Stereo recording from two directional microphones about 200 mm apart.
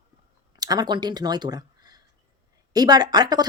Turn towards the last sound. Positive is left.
turn(degrees=-20)  # may be behind; listen again after turning